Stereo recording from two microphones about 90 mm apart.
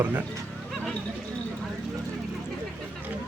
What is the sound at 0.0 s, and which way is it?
Speech, 20° right (ahead or behind).